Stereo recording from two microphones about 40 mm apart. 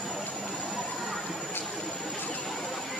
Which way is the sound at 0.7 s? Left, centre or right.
Centre.